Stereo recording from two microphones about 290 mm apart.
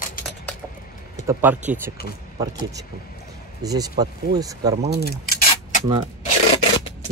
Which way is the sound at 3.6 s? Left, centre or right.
Centre.